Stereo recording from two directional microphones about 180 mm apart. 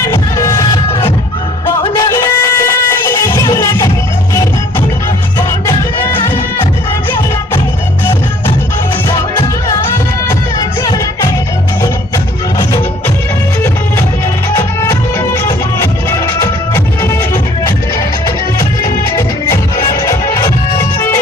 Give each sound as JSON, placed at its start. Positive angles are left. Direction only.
{"t": 0.1, "sound": "music", "side_deg": 20}
{"t": 1.9, "sound": "music", "side_deg": 15}
{"t": 10.8, "sound": "music", "side_deg": 20}
{"t": 14.5, "sound": "music", "side_deg": 15}
{"t": 19.1, "sound": "music", "side_deg": 20}